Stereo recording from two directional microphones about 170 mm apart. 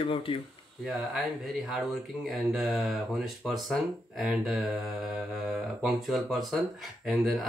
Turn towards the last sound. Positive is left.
turn(degrees=0)  # may be behind; listen again after turning